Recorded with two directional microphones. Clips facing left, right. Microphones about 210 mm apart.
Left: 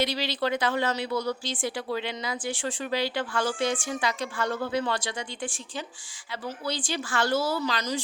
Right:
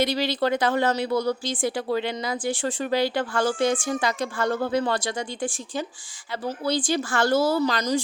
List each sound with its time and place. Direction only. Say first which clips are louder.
0.0 s speech: right 4 dB; 50° right (ahead or behind)